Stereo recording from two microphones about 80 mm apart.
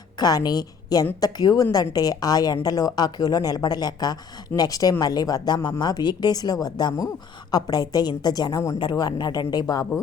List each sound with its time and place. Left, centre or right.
0.2 s a woman's voice: left
8.8 s speech: left